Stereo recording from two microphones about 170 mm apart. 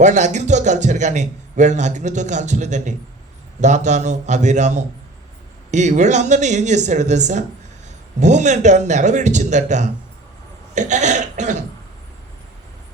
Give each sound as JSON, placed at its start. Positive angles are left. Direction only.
{"t": 0.0, "sound": "a man's voice", "side_deg": -45}